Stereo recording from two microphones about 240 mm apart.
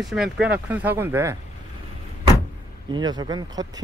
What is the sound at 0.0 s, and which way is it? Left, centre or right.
Speech, centre.